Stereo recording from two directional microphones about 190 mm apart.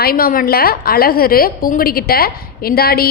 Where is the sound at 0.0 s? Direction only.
50° left (ahead or behind).